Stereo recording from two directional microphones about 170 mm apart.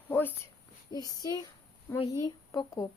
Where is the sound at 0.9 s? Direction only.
20° left (ahead or behind).